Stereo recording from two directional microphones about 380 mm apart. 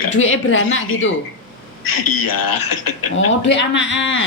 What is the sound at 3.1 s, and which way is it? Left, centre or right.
Speech, left.